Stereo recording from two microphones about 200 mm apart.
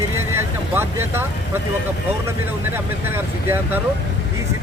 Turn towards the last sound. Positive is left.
turn(degrees=-10)  # may be behind; listen again after turning